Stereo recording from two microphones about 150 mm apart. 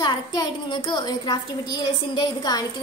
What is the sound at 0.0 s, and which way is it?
A child's voice, 25° left (ahead or behind).